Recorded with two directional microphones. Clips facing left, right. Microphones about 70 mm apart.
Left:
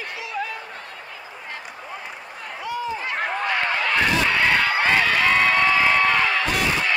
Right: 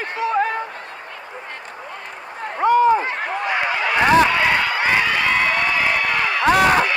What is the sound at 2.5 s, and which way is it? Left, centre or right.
Run, right.